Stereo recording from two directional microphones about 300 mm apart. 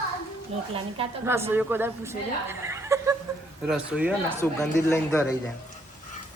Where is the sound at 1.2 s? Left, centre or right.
Centre.